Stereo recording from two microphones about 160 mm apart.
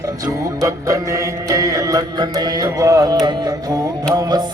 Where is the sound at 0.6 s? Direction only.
20° right (ahead or behind).